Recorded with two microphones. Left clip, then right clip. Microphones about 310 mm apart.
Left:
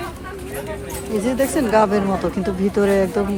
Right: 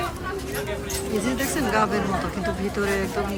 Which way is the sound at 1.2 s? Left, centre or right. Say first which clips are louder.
Left 9 dB; centre.